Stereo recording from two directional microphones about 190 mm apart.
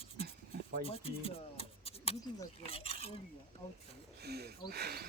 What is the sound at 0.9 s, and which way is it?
Speech, 30° left (ahead or behind).